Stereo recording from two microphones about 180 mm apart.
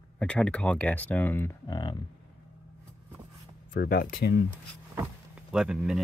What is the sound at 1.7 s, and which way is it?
Speech, 25° left (ahead or behind).